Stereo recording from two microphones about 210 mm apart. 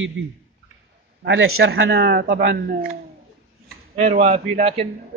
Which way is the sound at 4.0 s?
30° right (ahead or behind).